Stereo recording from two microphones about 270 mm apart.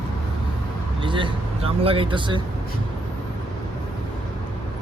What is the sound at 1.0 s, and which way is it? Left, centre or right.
Vehicle, centre.